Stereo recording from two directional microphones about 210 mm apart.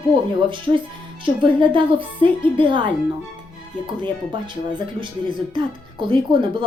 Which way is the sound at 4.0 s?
20° right (ahead or behind).